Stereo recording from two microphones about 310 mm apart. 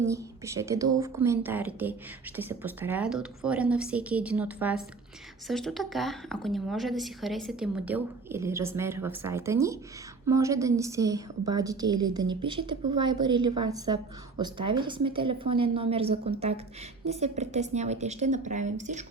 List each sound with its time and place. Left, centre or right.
0.0 s a woman's voice: centre